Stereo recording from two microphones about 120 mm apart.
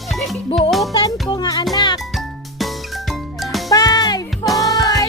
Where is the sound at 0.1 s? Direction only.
Centre (ahead or behind).